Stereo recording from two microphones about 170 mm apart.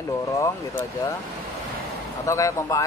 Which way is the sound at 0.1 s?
20° left (ahead or behind).